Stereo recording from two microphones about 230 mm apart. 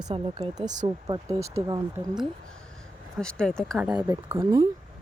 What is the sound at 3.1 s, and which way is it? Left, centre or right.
Speech, centre.